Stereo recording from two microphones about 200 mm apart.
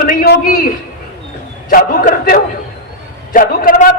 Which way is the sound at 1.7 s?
45° left (ahead or behind).